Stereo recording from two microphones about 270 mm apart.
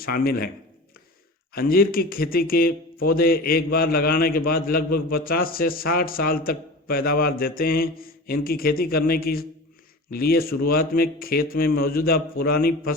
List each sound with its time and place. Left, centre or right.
0.0 s speech: left
1.5 s speech: left